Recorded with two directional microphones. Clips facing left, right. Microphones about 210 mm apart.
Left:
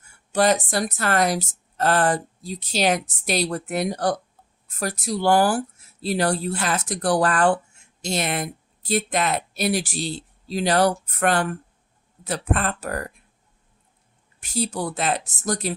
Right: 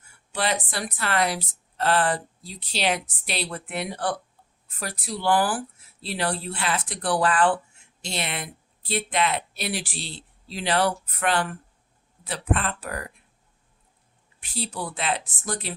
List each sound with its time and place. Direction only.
0.3 s speech: 45° left (ahead or behind)
14.4 s speech: 45° left (ahead or behind)